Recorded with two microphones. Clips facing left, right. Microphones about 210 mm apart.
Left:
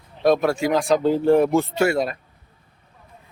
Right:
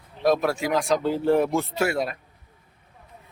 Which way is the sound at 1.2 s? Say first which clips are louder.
Left 4 dB; 50° left (ahead or behind).